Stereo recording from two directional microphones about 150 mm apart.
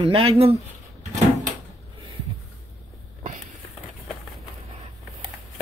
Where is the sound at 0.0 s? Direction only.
40° right (ahead or behind).